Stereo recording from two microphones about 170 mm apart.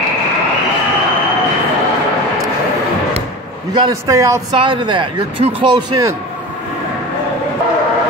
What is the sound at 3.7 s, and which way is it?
A man's voice, 20° right (ahead or behind).